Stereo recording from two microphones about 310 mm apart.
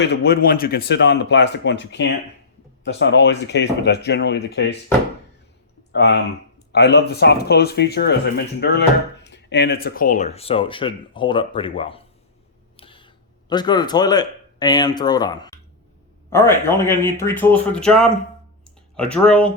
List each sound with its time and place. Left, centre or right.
0.0 s speech: left
5.9 s a man's voice: left; by 18.1 s centre
18.6 s a sound: centre